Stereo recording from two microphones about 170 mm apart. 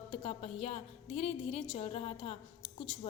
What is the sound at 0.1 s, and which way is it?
A woman's voice, 35° left (ahead or behind).